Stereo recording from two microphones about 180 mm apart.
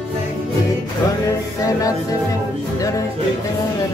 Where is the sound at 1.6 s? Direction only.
20° left (ahead or behind).